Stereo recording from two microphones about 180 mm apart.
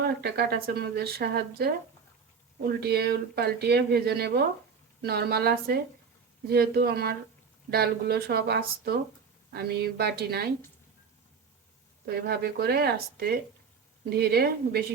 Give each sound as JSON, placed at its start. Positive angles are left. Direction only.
{"t": 0.2, "sound": "speech", "side_deg": -65}
{"t": 2.8, "sound": "speech", "side_deg": -65}
{"t": 12.0, "sound": "speech", "side_deg": -60}